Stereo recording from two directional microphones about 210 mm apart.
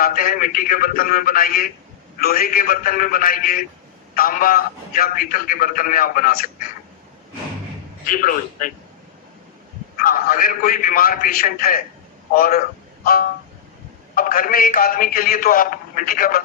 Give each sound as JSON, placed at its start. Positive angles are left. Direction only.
{"t": 0.0, "sound": "a man's voice", "side_deg": 40}
{"t": 8.0, "sound": "a man's voice", "side_deg": 40}
{"t": 10.0, "sound": "a man's voice", "side_deg": 45}
{"t": 14.2, "sound": "a man's voice", "side_deg": 40}